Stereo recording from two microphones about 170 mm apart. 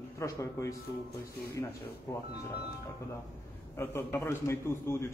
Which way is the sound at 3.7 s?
15° left (ahead or behind).